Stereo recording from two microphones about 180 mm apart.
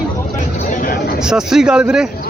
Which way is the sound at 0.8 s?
50° left (ahead or behind).